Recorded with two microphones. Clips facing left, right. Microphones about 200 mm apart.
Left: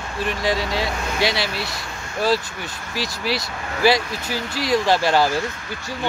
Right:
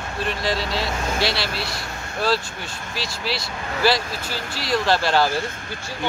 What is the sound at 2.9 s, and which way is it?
Speech, 15° left (ahead or behind).